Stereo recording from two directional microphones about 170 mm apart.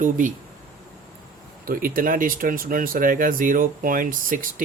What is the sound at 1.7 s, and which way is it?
Speech, 55° right (ahead or behind).